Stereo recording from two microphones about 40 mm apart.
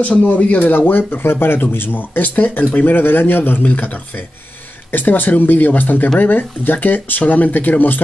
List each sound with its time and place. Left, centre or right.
0.1 s speech: left
0.7 s speech: left
3.5 s speech: left
4.9 s speech: left